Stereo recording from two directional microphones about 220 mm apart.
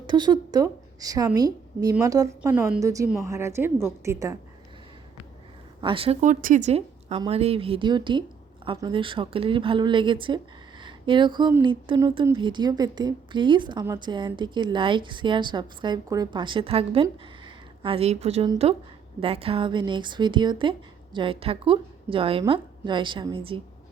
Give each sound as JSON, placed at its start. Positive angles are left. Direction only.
{"t": 0.1, "sound": "a woman's voice", "side_deg": -20}
{"t": 5.8, "sound": "a woman's voice", "side_deg": -25}